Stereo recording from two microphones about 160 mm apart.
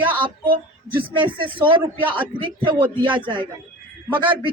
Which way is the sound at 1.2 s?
30° right (ahead or behind).